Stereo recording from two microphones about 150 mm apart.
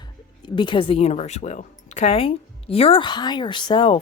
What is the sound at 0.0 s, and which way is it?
Speech, 30° left (ahead or behind).